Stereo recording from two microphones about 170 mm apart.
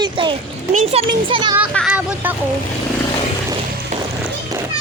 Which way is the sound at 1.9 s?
10° right (ahead or behind).